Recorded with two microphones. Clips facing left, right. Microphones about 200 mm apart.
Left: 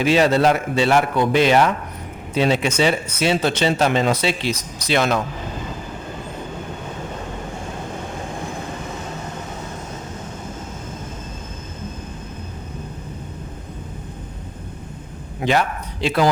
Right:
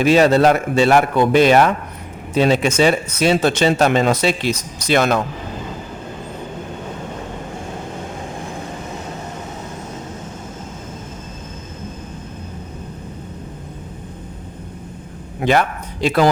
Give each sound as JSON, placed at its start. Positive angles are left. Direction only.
{"t": 0.0, "sound": "speech", "side_deg": -45}
{"t": 15.4, "sound": "speech", "side_deg": -60}